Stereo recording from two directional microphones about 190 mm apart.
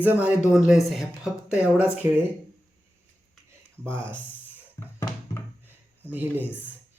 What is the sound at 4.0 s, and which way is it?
Speech, 5° left (ahead or behind).